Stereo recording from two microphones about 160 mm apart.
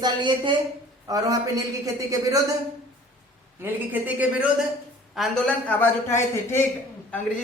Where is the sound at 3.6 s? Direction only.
10° right (ahead or behind).